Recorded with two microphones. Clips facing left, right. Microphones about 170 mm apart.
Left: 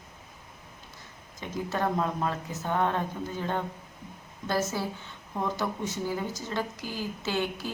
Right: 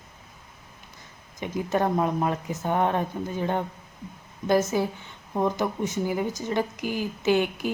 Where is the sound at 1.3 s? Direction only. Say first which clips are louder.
Right 5 dB; 15° right (ahead or behind).